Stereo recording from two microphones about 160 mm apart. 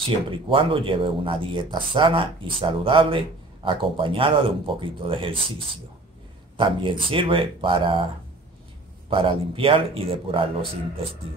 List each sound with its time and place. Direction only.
0.0 s speech: 35° right (ahead or behind)
6.5 s speech: 30° right (ahead or behind)
9.1 s speech: 35° right (ahead or behind)